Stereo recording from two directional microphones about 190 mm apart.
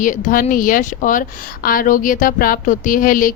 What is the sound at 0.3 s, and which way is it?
A woman's voice, 45° left (ahead or behind).